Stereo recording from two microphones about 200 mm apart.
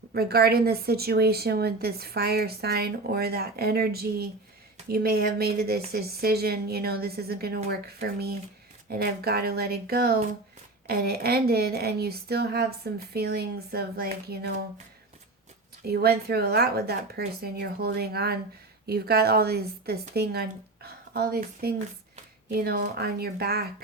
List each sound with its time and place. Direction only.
0.1 s a woman's voice: 50° right (ahead or behind)
15.8 s a woman's voice: 50° right (ahead or behind)